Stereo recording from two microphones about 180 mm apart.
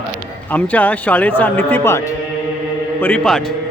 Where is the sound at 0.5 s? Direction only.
10° left (ahead or behind).